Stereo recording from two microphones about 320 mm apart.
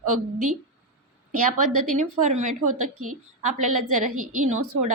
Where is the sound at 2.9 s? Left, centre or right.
Right.